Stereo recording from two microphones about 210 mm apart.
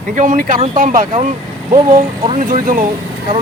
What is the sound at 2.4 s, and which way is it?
Speech, 40° right (ahead or behind).